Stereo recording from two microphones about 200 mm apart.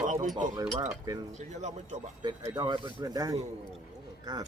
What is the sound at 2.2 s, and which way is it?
Speech, 20° right (ahead or behind).